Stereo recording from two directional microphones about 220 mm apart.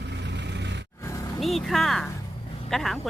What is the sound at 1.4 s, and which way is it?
Speech, centre (ahead or behind).